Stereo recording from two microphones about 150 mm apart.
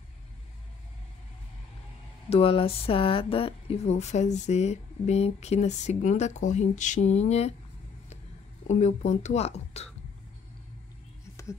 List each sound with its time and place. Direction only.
2.2 s speech: 40° left (ahead or behind)
8.6 s speech: 50° left (ahead or behind)